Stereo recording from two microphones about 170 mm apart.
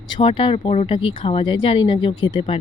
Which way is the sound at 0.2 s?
30° left (ahead or behind).